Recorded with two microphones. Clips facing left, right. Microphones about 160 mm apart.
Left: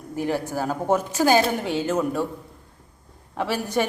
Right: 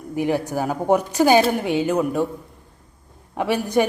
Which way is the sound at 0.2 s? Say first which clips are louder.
Right 3 dB; 15° right (ahead or behind).